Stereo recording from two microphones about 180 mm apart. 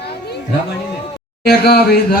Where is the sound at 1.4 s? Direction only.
60° left (ahead or behind).